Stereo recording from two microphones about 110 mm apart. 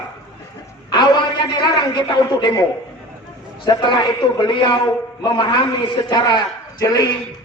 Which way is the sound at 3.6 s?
45° left (ahead or behind).